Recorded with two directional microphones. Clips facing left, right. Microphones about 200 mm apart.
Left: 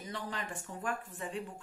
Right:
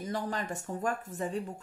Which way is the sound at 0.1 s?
40° right (ahead or behind).